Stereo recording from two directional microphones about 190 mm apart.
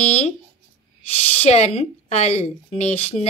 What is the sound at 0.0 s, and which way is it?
Speech, 35° left (ahead or behind).